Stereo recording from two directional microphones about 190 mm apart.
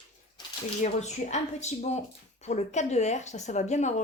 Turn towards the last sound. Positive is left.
turn(degrees=40)  # may be behind; listen again after turning